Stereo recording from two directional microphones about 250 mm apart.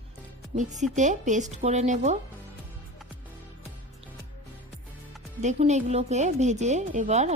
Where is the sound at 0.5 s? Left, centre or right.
Right.